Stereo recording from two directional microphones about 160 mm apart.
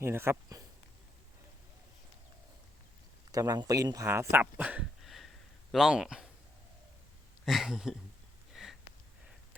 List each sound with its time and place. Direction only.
0.0 s speech: 15° right (ahead or behind)
3.3 s speech: 20° right (ahead or behind); by 6.2 s 5° right (ahead or behind)
7.4 s speech: centre (ahead or behind)
8.5 s sniff: centre (ahead or behind)